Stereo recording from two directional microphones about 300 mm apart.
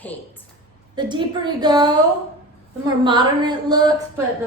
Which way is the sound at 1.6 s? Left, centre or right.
Centre.